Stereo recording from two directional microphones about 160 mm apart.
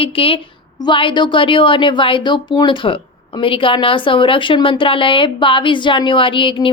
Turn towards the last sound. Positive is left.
turn(degrees=30)  # may be behind; listen again after turning